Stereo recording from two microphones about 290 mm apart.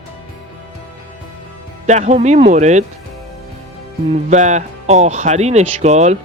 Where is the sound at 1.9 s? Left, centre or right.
Right.